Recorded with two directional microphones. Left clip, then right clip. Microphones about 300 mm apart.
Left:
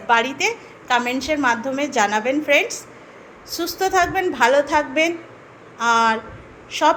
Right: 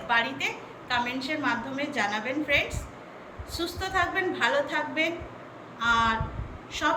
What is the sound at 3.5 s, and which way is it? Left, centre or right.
A woman's voice, centre.